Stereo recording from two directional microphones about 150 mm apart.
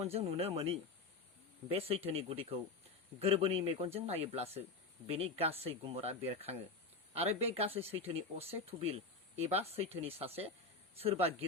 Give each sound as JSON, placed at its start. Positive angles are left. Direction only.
{"t": 0.0, "sound": "speech", "side_deg": -40}